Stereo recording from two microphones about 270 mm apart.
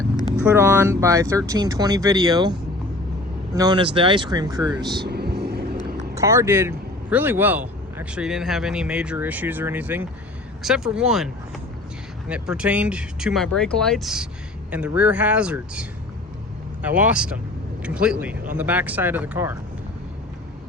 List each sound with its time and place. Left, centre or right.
0.3 s speech: centre
4.9 s vehicle: right
6.1 s speech: centre
12.3 s speech: centre